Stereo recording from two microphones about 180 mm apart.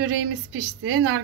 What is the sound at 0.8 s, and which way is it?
Speech, 90° right.